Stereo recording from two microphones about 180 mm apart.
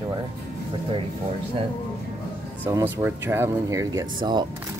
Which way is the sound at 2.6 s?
10° right (ahead or behind).